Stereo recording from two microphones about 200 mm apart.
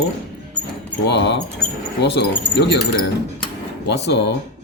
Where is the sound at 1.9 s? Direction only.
55° left (ahead or behind).